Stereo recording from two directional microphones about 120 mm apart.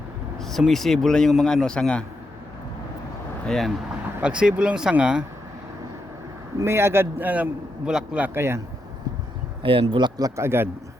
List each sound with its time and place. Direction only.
0.3 s speech: centre (ahead or behind)
3.4 s speech: 5° left (ahead or behind)
4.2 s speech: 10° right (ahead or behind)
6.6 s a man's voice: 20° right (ahead or behind)
9.6 s speech: 50° right (ahead or behind)
10.2 s a man's voice: 25° right (ahead or behind)